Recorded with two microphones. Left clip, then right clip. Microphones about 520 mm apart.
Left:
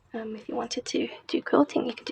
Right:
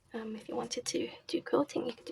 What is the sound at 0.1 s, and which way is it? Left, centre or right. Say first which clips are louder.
Speech: left 6 dB; right.